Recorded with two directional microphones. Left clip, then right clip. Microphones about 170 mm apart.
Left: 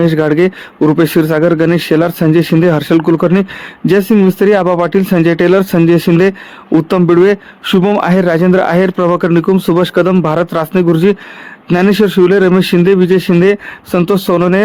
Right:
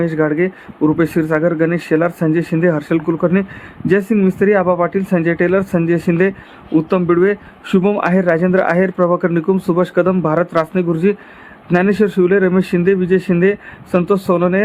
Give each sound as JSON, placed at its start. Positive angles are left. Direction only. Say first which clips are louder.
{"t": 0.0, "sound": "speech", "louder": "left 6 dB", "side_deg": 40}